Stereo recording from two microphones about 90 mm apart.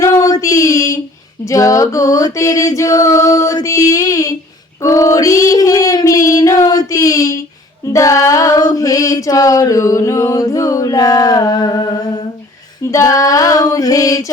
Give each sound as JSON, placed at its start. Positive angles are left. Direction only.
{"t": 0.0, "sound": "child singing", "side_deg": 35}
{"t": 1.5, "sound": "a sound", "side_deg": 40}
{"t": 4.8, "sound": "child singing", "side_deg": 40}
{"t": 7.9, "sound": "female singing", "side_deg": 40}